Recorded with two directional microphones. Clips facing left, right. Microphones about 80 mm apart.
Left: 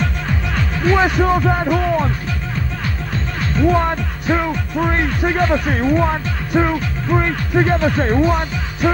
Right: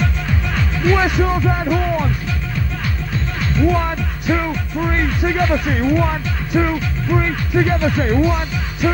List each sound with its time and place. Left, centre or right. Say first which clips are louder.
0.8 s speech: left 2 dB; left
3.7 s speech: left 3 dB; left